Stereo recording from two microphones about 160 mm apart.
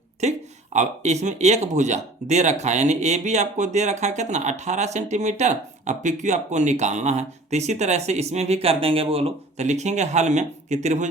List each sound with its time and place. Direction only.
0.2 s speech: 45° right (ahead or behind)